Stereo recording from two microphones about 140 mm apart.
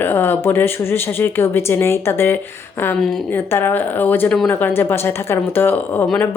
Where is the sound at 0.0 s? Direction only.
15° left (ahead or behind).